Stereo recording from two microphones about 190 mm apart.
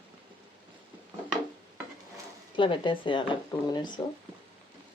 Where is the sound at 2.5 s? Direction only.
25° left (ahead or behind).